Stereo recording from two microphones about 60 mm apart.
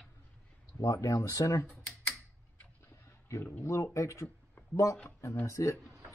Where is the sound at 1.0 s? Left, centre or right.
Left.